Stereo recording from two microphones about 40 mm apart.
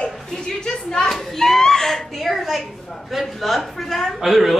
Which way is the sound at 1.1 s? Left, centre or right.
Centre.